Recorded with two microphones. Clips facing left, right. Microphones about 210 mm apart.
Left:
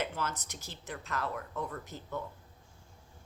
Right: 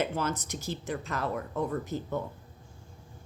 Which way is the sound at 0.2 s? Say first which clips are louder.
Right 6 dB; 20° right (ahead or behind).